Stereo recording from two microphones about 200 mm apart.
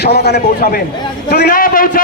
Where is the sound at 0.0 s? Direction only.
55° left (ahead or behind).